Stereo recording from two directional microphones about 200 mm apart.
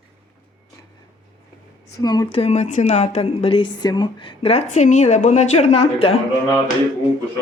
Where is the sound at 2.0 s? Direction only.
20° left (ahead or behind).